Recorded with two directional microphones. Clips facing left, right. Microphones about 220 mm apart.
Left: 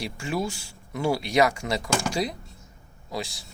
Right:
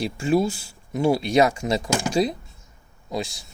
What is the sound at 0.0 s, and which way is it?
Speech, 25° right (ahead or behind).